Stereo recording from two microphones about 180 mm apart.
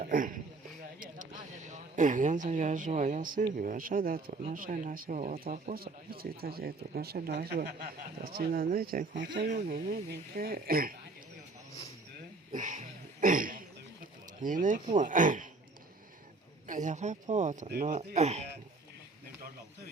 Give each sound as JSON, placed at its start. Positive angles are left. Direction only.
{"t": 0.0, "sound": "speech", "side_deg": -50}
{"t": 12.5, "sound": "a sound", "side_deg": -45}
{"t": 14.9, "sound": "speech", "side_deg": -45}
{"t": 16.6, "sound": "speech", "side_deg": -45}